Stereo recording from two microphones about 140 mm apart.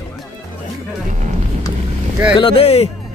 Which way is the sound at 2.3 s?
40° left (ahead or behind).